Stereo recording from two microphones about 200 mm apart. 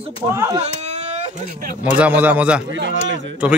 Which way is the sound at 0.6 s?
35° right (ahead or behind).